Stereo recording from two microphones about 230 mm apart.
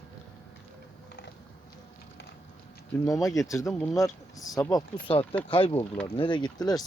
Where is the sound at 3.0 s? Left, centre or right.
Centre.